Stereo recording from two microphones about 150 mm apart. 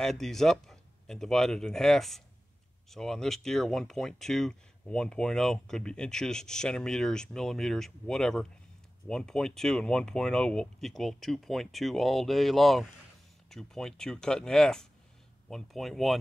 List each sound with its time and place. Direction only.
0.0 s speech: centre (ahead or behind)